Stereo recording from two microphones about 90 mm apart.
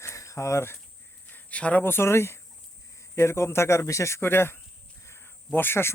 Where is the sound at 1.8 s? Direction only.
25° left (ahead or behind).